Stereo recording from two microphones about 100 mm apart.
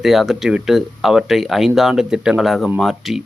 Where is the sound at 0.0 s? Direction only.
Centre (ahead or behind).